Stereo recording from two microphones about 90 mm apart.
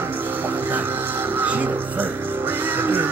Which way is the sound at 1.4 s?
20° right (ahead or behind).